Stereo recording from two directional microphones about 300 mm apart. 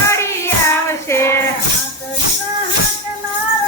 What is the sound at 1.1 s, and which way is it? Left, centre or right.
Music, centre.